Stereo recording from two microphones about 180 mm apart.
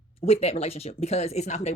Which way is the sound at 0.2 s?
35° left (ahead or behind).